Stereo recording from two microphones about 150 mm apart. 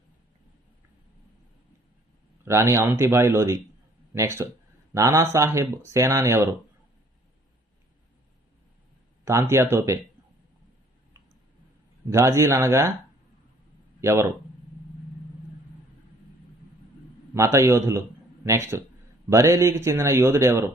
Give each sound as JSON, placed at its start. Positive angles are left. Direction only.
{"t": 2.4, "sound": "a man's voice", "side_deg": -20}
{"t": 9.2, "sound": "speech", "side_deg": -20}
{"t": 12.1, "sound": "speech", "side_deg": -20}
{"t": 14.0, "sound": "a man's voice", "side_deg": -20}
{"t": 17.3, "sound": "speech", "side_deg": -20}